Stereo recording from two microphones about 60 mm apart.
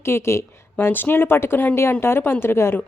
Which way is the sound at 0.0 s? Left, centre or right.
Left.